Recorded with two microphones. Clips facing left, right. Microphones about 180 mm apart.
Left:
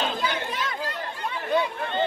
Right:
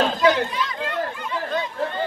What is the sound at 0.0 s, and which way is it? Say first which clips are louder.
Chatter: right 9 dB; 70° right (ahead or behind).